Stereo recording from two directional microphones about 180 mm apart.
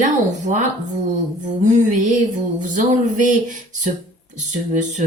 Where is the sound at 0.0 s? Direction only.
45° right (ahead or behind).